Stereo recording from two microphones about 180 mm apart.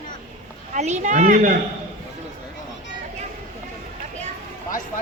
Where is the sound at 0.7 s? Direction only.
40° right (ahead or behind).